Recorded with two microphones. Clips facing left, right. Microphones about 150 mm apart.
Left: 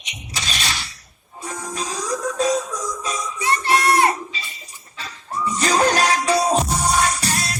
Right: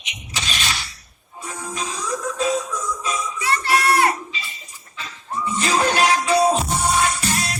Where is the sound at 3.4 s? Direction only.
25° left (ahead or behind).